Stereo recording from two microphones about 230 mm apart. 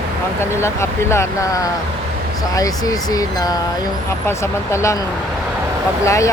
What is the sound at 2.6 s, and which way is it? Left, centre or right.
Speech, centre.